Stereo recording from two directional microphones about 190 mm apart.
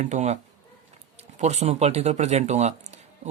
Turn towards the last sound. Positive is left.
turn(degrees=-35)  # may be behind; listen again after turning